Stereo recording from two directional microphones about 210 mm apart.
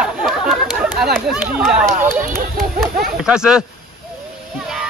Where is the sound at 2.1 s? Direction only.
45° right (ahead or behind).